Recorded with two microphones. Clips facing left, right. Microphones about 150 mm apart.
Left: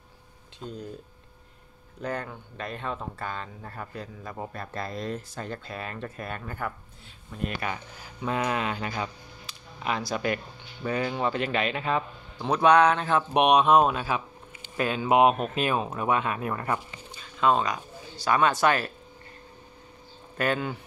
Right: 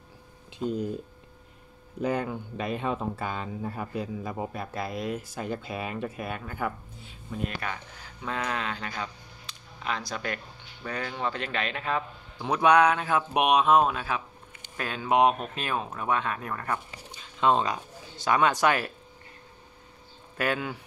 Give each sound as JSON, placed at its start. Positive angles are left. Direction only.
{"t": 0.6, "sound": "speech", "side_deg": -10}
{"t": 2.0, "sound": "speech", "side_deg": -10}
{"t": 7.6, "sound": "speech", "side_deg": 10}
{"t": 12.4, "sound": "speech", "side_deg": -15}
{"t": 17.1, "sound": "speech", "side_deg": -25}
{"t": 20.3, "sound": "speech", "side_deg": -10}